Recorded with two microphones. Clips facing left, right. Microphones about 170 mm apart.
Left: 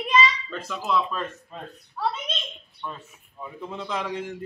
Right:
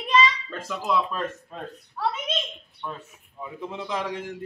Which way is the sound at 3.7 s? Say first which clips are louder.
Even; 15° right (ahead or behind).